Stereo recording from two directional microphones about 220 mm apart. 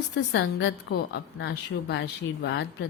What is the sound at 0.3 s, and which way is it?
A woman's voice, 50° left (ahead or behind).